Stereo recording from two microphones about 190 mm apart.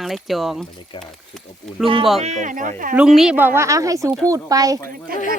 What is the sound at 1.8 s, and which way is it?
Speech, 30° right (ahead or behind).